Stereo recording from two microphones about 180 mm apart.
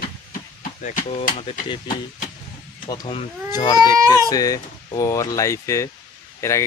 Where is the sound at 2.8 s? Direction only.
25° left (ahead or behind).